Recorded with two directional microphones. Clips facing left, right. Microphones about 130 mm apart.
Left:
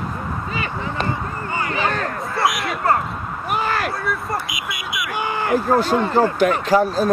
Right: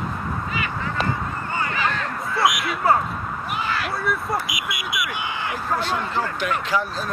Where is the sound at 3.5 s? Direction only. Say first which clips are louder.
Left 6 dB; 45° left (ahead or behind).